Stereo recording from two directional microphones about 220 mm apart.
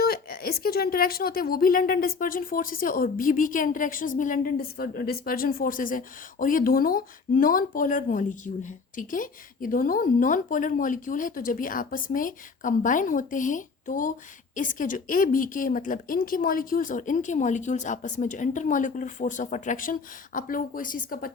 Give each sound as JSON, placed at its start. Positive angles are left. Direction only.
{"t": 0.0, "sound": "a woman's voice", "side_deg": 45}